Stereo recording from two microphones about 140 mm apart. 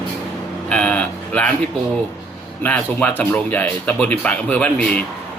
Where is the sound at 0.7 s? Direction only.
10° left (ahead or behind).